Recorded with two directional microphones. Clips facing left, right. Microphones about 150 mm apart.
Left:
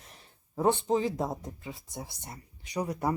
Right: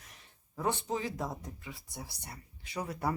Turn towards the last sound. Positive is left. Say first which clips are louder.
# left 4 dB
turn(degrees=15)  # may be behind; listen again after turning